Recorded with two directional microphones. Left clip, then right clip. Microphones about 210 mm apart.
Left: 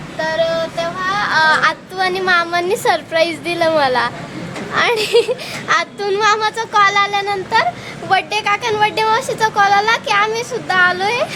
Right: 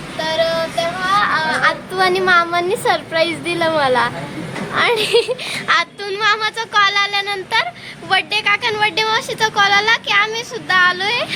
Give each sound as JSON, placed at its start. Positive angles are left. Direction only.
{"t": 0.2, "sound": "child singing", "side_deg": -10}
{"t": 1.3, "sound": "a sound", "side_deg": 40}
{"t": 2.0, "sound": "speech", "side_deg": 0}